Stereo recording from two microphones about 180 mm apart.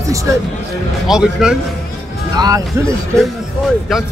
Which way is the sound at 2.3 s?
20° right (ahead or behind).